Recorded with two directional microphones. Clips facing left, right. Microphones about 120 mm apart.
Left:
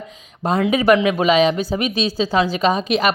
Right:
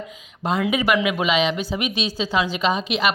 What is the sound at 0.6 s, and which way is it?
Speech, 40° left (ahead or behind).